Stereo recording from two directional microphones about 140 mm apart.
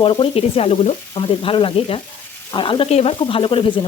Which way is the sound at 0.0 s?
40° left (ahead or behind).